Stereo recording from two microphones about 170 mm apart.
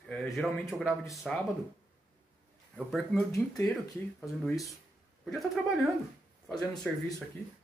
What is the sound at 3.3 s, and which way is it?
Speech, 20° left (ahead or behind).